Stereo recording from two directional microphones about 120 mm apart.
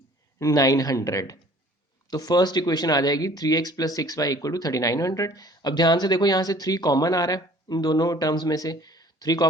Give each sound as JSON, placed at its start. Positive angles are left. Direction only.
{"t": 0.3, "sound": "speech", "side_deg": 30}